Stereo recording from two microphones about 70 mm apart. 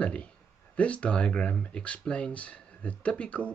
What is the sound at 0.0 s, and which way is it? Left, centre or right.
Speech, centre.